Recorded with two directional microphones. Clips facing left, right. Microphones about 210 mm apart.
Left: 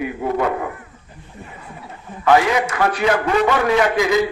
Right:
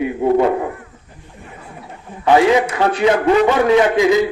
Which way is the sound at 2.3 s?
25° right (ahead or behind).